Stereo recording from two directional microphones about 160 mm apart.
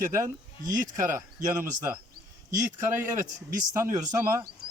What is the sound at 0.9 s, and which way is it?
Speech, 20° right (ahead or behind).